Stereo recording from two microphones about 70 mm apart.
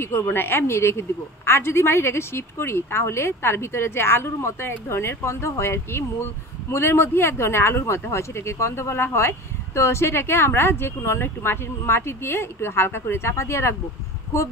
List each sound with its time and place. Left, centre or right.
0.0 s a woman's voice: left